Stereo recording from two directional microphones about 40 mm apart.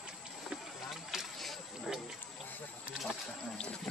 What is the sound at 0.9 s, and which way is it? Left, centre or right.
Boat, centre.